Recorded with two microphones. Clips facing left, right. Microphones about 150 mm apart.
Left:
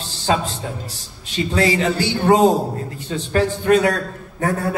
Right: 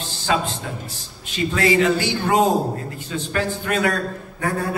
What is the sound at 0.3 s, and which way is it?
A man's voice, 30° left (ahead or behind).